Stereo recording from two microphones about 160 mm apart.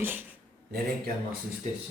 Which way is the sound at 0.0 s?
10° right (ahead or behind).